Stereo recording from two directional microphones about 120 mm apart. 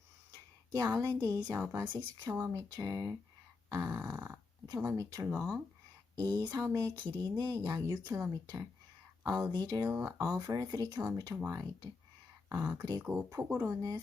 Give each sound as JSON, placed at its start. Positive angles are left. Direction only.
{"t": 0.7, "sound": "speech", "side_deg": -20}
{"t": 1.9, "sound": "speech", "side_deg": -35}
{"t": 3.7, "sound": "grunt", "side_deg": -25}
{"t": 4.8, "sound": "speech", "side_deg": -25}
{"t": 5.4, "sound": "speech", "side_deg": 0}
{"t": 6.1, "sound": "speech", "side_deg": -30}
{"t": 9.9, "sound": "speech", "side_deg": -20}